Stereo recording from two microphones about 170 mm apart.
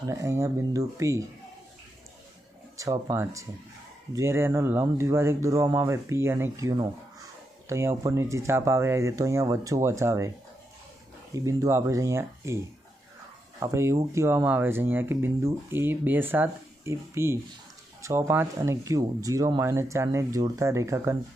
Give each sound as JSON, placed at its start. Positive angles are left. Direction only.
{"t": 0.1, "sound": "speech", "side_deg": -15}
{"t": 2.7, "sound": "speech", "side_deg": -20}
{"t": 11.3, "sound": "speech", "side_deg": -20}
{"t": 13.6, "sound": "speech", "side_deg": -15}